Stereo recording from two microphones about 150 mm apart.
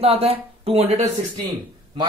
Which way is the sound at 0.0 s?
40° right (ahead or behind).